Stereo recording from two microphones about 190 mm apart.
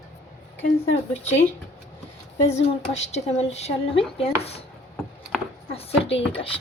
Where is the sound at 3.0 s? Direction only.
35° left (ahead or behind).